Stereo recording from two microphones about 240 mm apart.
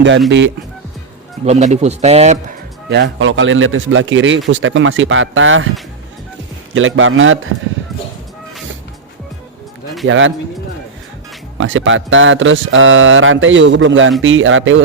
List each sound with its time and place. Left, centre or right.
0.3 s speech: right
1.5 s a man's voice: right
2.9 s speech: right
6.7 s a man's voice: right
10.1 s speech: right
11.5 s speech: right